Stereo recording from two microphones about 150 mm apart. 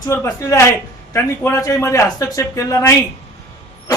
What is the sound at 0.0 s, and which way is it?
Speech, 20° left (ahead or behind).